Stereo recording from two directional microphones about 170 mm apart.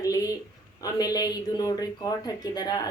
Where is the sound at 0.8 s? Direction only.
20° left (ahead or behind).